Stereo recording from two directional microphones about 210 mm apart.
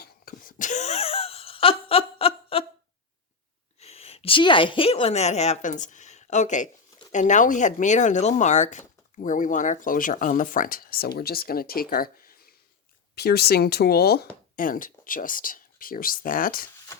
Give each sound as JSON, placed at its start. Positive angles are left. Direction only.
{"t": 0.0, "sound": "wail", "side_deg": 40}
{"t": 3.8, "sound": "a woman's voice", "side_deg": 30}